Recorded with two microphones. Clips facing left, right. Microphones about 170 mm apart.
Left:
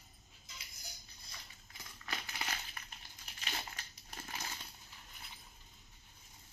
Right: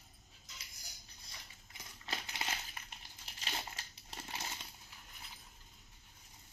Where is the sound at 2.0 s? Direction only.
25° right (ahead or behind).